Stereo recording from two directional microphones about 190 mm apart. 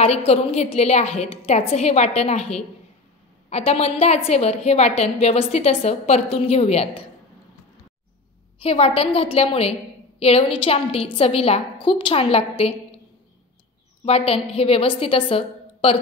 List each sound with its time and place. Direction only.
0.0 s a woman's voice: 35° left (ahead or behind)
8.5 s a woman's voice: 30° left (ahead or behind)
14.0 s a woman's voice: 30° left (ahead or behind)